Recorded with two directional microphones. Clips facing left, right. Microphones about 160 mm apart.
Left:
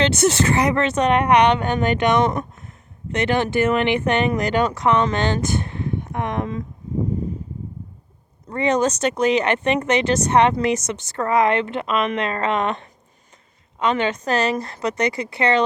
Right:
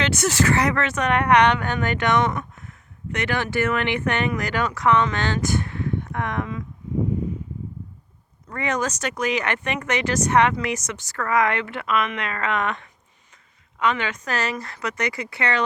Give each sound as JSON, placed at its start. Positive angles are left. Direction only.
{"t": 0.0, "sound": "speech", "side_deg": 25}
{"t": 8.4, "sound": "speech", "side_deg": 25}